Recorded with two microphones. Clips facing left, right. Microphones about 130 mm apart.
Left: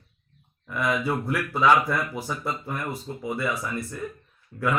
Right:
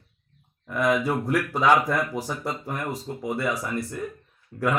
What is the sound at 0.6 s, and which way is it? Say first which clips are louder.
A man's voice: right 3 dB; 50° right (ahead or behind).